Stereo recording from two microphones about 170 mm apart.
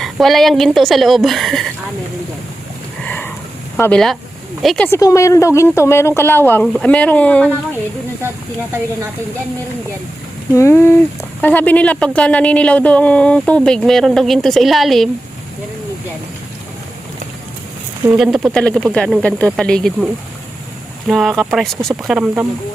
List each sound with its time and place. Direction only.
0.0 s a woman's voice: centre (ahead or behind)
3.0 s a sound: 10° left (ahead or behind)
3.8 s a woman's voice: 5° left (ahead or behind)
4.9 s speech: 20° left (ahead or behind)
10.5 s speech: 15° left (ahead or behind); by 15.1 s centre (ahead or behind)
18.0 s a woman's voice: 5° right (ahead or behind)
21.1 s a woman's voice: centre (ahead or behind)